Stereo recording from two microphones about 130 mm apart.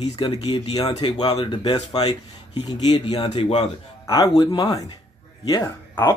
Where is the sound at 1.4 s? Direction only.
35° left (ahead or behind).